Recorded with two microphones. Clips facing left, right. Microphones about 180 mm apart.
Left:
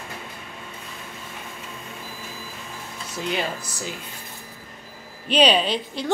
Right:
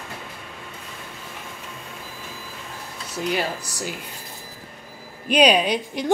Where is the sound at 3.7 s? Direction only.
10° right (ahead or behind).